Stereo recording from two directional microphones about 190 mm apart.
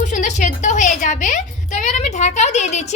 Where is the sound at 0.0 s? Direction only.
40° left (ahead or behind).